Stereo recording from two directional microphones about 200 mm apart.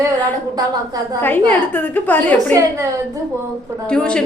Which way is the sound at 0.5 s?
20° right (ahead or behind).